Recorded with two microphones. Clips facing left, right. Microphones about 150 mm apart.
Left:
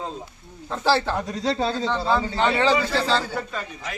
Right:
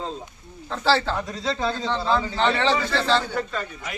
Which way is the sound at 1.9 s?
10° left (ahead or behind).